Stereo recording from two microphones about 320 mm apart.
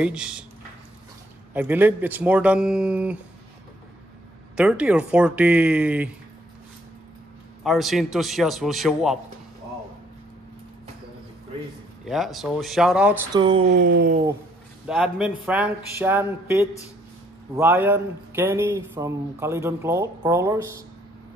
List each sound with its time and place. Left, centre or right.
0.0 s a man's voice: centre
1.5 s a man's voice: centre
4.6 s a man's voice: centre
7.6 s a man's voice: centre
12.0 s a man's voice: centre
13.8 s speech: right
14.9 s a man's voice: centre